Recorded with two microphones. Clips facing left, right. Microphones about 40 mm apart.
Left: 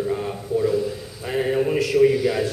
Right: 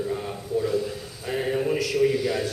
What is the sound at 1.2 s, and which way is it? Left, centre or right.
A man's voice, centre.